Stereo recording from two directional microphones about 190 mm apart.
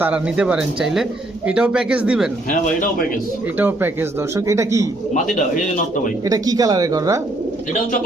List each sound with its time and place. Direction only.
0.0 s speech: 5° right (ahead or behind)
3.6 s a man's voice: 10° right (ahead or behind)
5.1 s a man's voice: 40° left (ahead or behind)
6.2 s speech: 20° right (ahead or behind)